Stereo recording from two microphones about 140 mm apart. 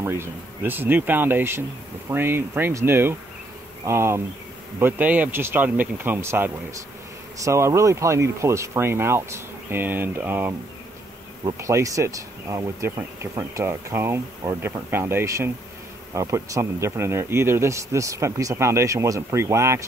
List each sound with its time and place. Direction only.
0.0 s speech: 20° right (ahead or behind)